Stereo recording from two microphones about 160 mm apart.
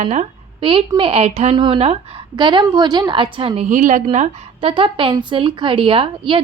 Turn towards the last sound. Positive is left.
turn(degrees=-35)  # may be behind; listen again after turning